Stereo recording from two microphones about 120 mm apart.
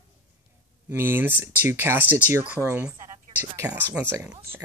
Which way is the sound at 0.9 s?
20° right (ahead or behind).